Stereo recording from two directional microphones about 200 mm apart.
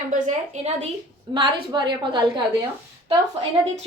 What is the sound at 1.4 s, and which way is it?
Speech, 20° right (ahead or behind).